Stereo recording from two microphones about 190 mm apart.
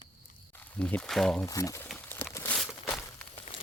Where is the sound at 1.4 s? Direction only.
15° left (ahead or behind).